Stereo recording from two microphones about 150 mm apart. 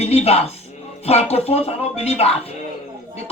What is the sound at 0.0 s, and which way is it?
Speech, 45° left (ahead or behind).